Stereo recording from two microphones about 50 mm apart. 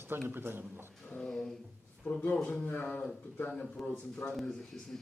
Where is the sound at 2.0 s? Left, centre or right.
Left.